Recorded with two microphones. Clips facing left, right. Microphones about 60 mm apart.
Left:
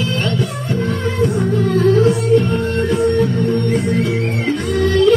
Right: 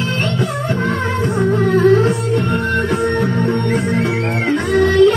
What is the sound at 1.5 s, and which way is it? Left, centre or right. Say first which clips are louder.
Music: right 4 dB; right.